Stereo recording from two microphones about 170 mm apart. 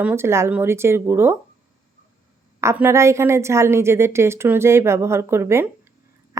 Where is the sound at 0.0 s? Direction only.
10° right (ahead or behind).